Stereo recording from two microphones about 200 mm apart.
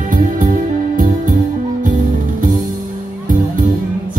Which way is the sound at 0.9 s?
40° right (ahead or behind).